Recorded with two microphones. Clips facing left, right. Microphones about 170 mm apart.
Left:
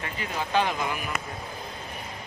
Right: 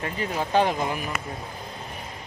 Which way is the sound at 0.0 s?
40° right (ahead or behind).